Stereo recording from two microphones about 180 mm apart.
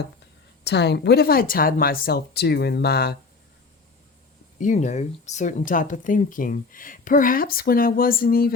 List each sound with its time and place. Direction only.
0.6 s speech: 70° left (ahead or behind)
4.6 s speech: 40° left (ahead or behind)